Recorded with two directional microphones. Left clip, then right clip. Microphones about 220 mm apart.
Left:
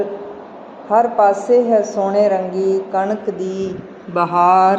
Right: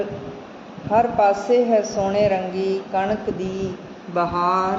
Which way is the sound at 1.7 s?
5° left (ahead or behind).